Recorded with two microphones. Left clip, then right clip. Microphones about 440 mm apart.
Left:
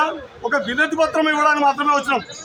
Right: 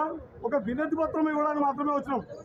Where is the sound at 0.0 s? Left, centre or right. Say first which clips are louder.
Left 10 dB; right.